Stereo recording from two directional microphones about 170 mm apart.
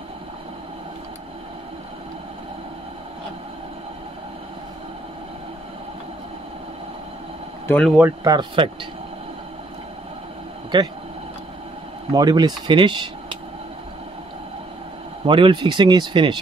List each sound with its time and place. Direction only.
7.6 s speech: 5° left (ahead or behind)
8.2 s speech: 25° right (ahead or behind)
10.7 s speech: 25° right (ahead or behind)
12.1 s speech: 25° right (ahead or behind)
15.2 s speech: 30° right (ahead or behind)